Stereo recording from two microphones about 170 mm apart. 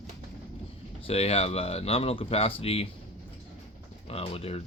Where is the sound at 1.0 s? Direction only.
35° left (ahead or behind).